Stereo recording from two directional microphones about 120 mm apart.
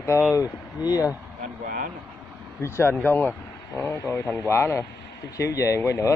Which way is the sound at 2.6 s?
20° left (ahead or behind).